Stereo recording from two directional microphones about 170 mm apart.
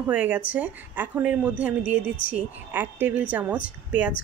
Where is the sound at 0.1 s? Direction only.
10° right (ahead or behind).